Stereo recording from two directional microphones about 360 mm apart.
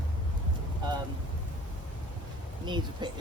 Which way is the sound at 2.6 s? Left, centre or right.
Centre.